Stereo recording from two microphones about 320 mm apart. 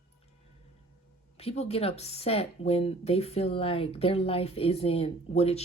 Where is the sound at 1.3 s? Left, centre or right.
Centre.